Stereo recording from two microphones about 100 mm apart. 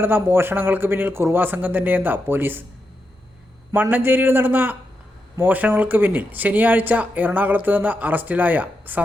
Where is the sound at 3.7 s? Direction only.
20° right (ahead or behind).